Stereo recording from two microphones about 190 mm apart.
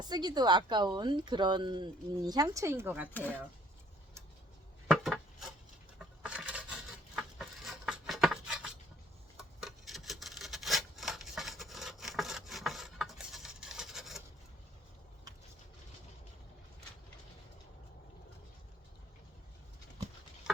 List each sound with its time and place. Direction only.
0.0 s speech: 20° right (ahead or behind)
3.1 s speech: 10° left (ahead or behind)
4.9 s a sound: centre (ahead or behind)
9.4 s rub: centre (ahead or behind)